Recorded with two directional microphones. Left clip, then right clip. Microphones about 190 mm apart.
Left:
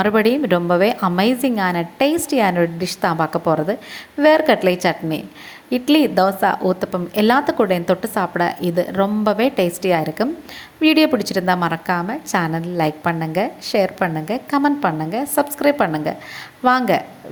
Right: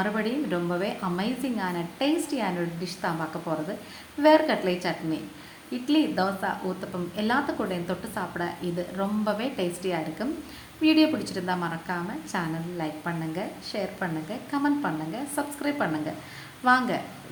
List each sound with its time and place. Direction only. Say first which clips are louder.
0.0 s a woman's voice: left 12 dB; 45° left (ahead or behind)